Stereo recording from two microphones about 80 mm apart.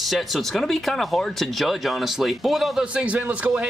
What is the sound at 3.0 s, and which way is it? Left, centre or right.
Speech, centre.